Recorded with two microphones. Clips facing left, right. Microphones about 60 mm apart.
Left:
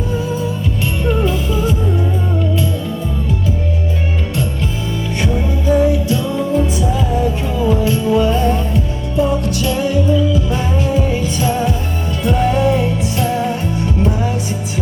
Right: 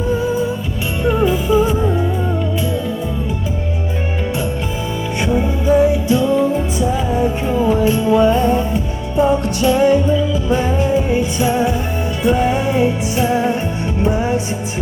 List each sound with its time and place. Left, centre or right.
1.0 s music: centre
5.2 s music: right